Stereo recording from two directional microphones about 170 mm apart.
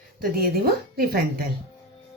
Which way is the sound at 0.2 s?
60° right (ahead or behind).